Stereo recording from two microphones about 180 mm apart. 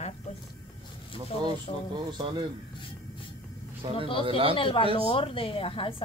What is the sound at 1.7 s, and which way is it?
Speech, 30° left (ahead or behind).